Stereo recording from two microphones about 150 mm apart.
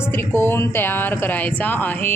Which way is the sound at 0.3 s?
15° left (ahead or behind).